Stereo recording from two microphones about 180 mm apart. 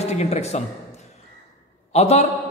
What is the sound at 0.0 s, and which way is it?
Speech, 35° left (ahead or behind).